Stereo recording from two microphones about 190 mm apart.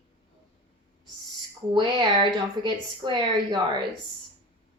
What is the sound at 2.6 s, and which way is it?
A woman's voice, 25° right (ahead or behind).